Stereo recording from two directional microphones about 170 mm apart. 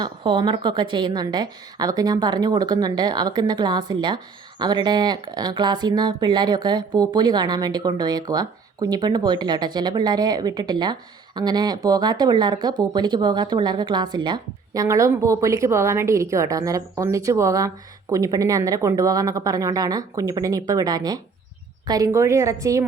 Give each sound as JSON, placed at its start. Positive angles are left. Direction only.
{"t": 0.0, "sound": "a woman's voice", "side_deg": -30}